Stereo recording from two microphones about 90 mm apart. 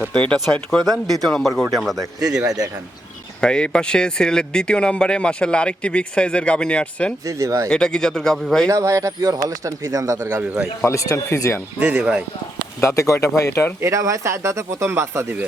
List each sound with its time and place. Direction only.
0.1 s speech: 15° left (ahead or behind)
3.4 s speech: 10° left (ahead or behind)
7.3 s speech: 35° right (ahead or behind)
7.7 s speech: 10° left (ahead or behind)
8.7 s speech: 35° right (ahead or behind)
10.2 s a man's voice: 20° right (ahead or behind)
10.8 s speech: 35° left (ahead or behind)
11.8 s speech: 15° right (ahead or behind)
12.8 s speech: 35° left (ahead or behind)
13.8 s speech: 35° right (ahead or behind)